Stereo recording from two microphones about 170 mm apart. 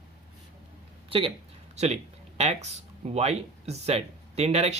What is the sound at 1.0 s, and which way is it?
Speech, 30° right (ahead or behind).